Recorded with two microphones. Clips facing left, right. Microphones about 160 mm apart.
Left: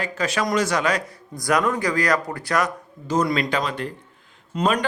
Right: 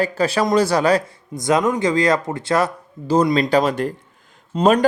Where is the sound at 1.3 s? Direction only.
20° right (ahead or behind).